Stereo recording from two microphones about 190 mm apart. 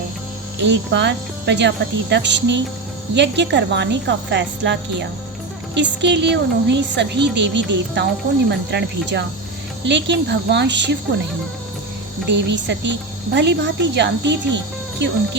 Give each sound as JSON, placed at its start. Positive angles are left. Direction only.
{"t": 0.6, "sound": "a woman's voice", "side_deg": -65}
{"t": 12.3, "sound": "speech", "side_deg": -70}